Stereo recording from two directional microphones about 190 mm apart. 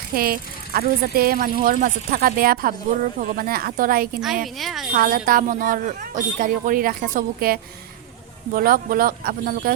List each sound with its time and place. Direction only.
0.1 s speech: 50° right (ahead or behind)
4.5 s speech: centre (ahead or behind)
4.9 s speech: 50° right (ahead or behind)